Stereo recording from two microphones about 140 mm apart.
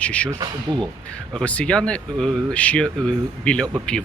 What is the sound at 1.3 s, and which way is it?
Speech, 10° left (ahead or behind).